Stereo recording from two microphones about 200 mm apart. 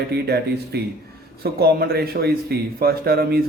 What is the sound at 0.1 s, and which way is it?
Speech, 55° right (ahead or behind).